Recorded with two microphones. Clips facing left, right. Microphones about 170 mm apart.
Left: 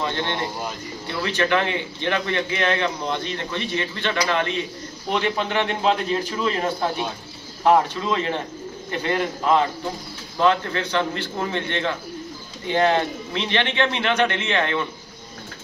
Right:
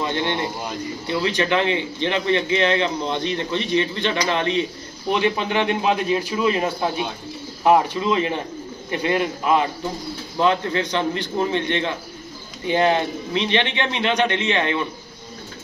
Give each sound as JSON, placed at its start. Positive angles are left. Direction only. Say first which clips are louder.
{"t": 0.1, "sound": "a man's voice", "louder": "right 3 dB", "side_deg": -15}
{"t": 7.6, "sound": "a man's voice", "louder": "right 1 dB", "side_deg": -10}